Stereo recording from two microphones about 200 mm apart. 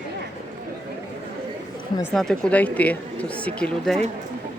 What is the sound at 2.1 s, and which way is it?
Speech, 5° left (ahead or behind).